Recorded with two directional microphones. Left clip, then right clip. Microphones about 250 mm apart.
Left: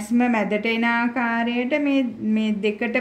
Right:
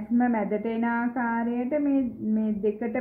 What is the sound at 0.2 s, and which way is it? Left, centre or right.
Speech, left.